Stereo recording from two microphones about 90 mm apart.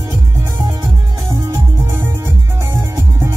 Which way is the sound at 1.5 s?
25° right (ahead or behind).